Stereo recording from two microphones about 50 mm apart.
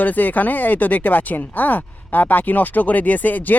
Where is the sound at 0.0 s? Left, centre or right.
Left.